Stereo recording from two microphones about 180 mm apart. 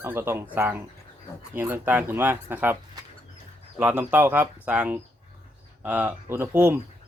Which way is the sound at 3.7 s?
15° right (ahead or behind).